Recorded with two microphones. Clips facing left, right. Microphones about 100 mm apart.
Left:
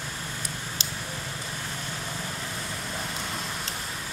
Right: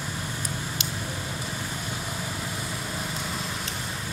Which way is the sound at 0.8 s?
30° left (ahead or behind).